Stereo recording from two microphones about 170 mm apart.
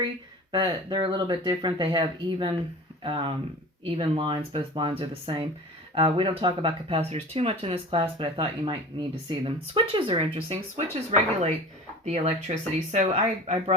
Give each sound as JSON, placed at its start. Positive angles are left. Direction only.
{"t": 0.5, "sound": "speech", "side_deg": -25}